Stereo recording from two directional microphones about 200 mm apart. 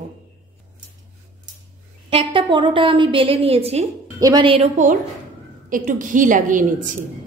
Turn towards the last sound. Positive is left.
turn(degrees=-40)  # may be behind; listen again after turning